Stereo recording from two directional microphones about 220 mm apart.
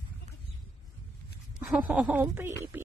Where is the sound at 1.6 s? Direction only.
5° right (ahead or behind).